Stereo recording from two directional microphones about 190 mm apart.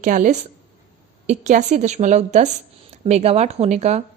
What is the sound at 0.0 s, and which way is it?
A woman's voice, 45° right (ahead or behind).